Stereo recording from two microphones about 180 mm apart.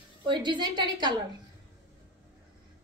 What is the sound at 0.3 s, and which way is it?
Speech, 25° right (ahead or behind).